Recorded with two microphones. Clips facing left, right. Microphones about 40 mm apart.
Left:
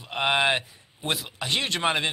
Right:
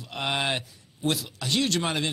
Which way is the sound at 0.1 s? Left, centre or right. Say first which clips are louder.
Left 5 dB; left.